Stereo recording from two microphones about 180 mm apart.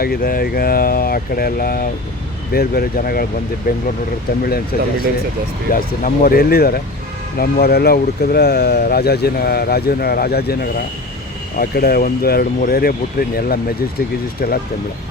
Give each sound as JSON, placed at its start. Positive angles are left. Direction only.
{"t": 0.0, "sound": "speech", "side_deg": 55}